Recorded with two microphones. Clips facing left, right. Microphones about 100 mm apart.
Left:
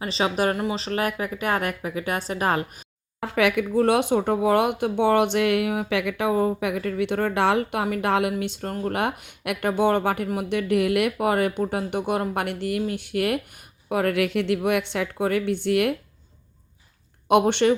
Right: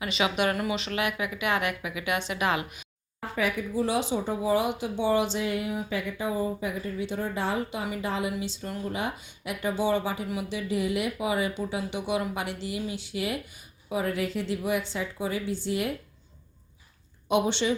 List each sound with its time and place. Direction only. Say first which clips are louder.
0.0 s a woman's voice: left 3 dB; 35° left (ahead or behind)
3.2 s a woman's voice: left 7 dB; 90° left; by 16.0 s 65° left (ahead or behind)
17.2 s speech: left 7 dB; 60° left (ahead or behind)